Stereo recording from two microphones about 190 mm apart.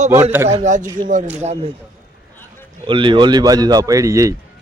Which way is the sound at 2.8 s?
25° right (ahead or behind).